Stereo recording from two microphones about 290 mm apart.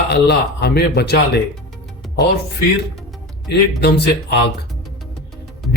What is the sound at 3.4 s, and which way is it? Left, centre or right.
Speech, left.